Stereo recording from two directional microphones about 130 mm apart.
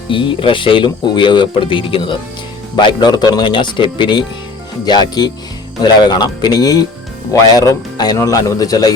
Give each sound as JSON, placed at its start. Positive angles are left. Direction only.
{"t": 0.1, "sound": "speech", "side_deg": 40}